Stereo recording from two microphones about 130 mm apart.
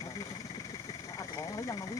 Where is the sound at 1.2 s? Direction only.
30° left (ahead or behind).